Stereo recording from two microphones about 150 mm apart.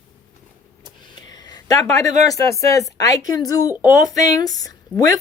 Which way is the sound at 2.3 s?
20° left (ahead or behind).